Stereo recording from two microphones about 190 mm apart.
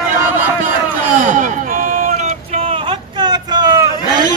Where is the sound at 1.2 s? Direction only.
45° right (ahead or behind); by 4.3 s 20° right (ahead or behind).